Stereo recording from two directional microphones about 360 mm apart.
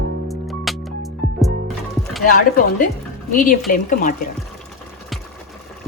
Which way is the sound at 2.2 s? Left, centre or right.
Left.